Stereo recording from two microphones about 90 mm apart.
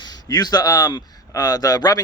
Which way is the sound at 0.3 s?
45° left (ahead or behind).